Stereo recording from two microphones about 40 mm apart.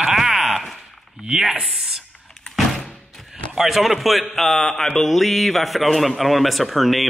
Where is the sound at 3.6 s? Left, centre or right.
Centre.